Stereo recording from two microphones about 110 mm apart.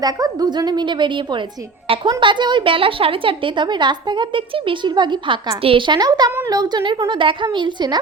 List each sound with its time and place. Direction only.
0.0 s a woman's voice: 35° right (ahead or behind)